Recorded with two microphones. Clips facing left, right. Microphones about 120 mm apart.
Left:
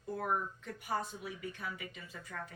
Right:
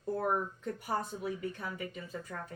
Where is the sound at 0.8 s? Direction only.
40° right (ahead or behind).